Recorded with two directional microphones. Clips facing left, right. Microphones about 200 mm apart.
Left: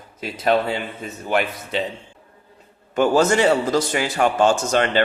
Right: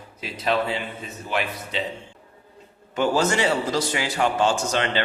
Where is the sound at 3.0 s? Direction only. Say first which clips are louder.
Left 5 dB; 50° left (ahead or behind).